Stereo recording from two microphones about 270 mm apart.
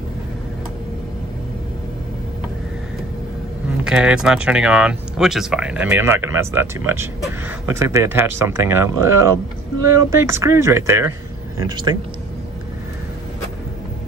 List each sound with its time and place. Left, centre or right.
3.8 s speech: centre